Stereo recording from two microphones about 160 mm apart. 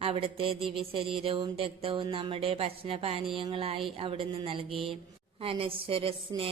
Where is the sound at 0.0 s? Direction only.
35° right (ahead or behind).